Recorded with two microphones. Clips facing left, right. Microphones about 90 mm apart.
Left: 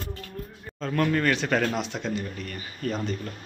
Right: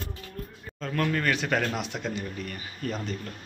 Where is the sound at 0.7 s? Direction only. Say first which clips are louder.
Left 3 dB; centre (ahead or behind).